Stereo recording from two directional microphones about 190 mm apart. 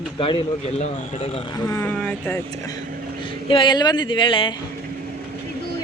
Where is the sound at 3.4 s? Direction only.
25° left (ahead or behind).